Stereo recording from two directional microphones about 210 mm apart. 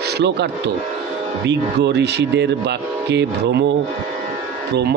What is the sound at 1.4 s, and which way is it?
Speech, 55° right (ahead or behind).